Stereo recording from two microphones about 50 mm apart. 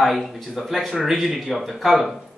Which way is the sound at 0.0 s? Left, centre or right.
Centre.